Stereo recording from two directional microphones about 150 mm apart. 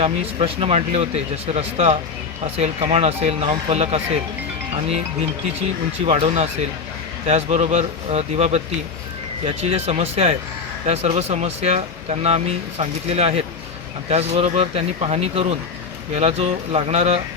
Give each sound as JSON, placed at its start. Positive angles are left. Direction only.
{"t": 0.0, "sound": "speech", "side_deg": -40}
{"t": 6.1, "sound": "speech", "side_deg": -45}